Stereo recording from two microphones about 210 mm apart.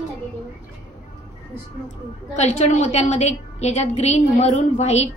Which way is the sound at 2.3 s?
30° left (ahead or behind).